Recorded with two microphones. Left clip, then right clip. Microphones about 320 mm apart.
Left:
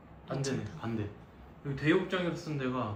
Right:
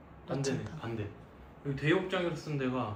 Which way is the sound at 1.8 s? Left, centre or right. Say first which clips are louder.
Left 1 dB; left.